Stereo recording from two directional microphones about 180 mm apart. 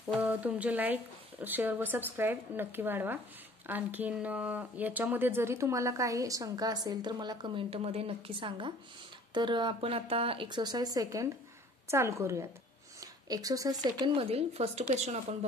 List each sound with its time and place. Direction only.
0.1 s speech: 10° right (ahead or behind); by 15.1 s 40° right (ahead or behind)